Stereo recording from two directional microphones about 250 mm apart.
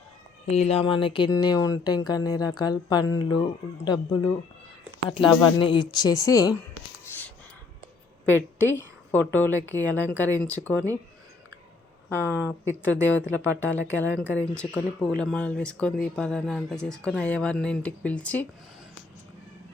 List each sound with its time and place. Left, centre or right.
0.4 s speech: left
8.3 s a woman's voice: centre
12.0 s speech: centre